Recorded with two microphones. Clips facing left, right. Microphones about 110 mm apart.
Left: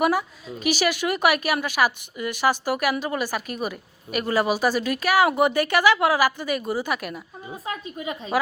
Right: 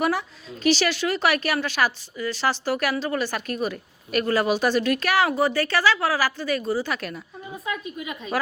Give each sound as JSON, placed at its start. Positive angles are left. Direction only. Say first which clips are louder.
{"t": 0.0, "sound": "a woman's voice", "louder": "left 2 dB", "side_deg": 10}
{"t": 7.6, "sound": "a woman's voice", "louder": "even", "side_deg": 35}